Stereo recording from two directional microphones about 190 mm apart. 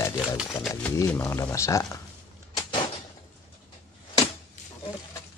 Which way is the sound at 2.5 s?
25° left (ahead or behind).